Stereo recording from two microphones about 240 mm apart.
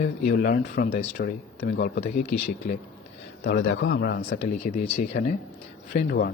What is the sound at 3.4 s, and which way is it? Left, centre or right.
Speech, left.